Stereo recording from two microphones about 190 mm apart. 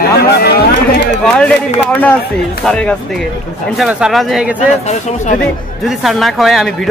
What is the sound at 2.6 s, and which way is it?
Music, 5° left (ahead or behind).